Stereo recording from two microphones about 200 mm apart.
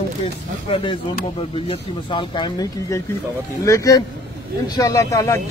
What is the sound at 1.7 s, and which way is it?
Speech, 25° left (ahead or behind).